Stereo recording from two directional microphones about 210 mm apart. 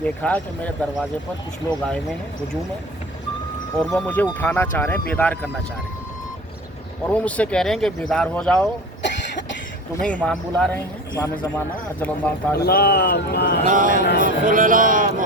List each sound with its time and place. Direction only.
0.0 s speech: 5° left (ahead or behind)
3.9 s speech: 5° left (ahead or behind)
7.1 s speech: 5° left (ahead or behind)
9.0 s cough: 60° left (ahead or behind)
10.0 s speech: 5° left (ahead or behind)
12.5 s speech: 50° left (ahead or behind)
13.7 s speech: 40° right (ahead or behind)